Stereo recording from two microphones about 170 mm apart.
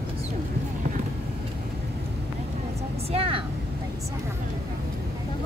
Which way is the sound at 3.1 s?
35° right (ahead or behind).